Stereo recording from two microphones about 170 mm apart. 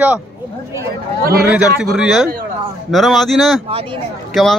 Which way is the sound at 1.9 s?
Centre (ahead or behind).